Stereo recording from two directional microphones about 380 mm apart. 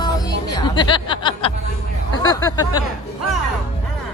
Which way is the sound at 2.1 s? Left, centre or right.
Centre.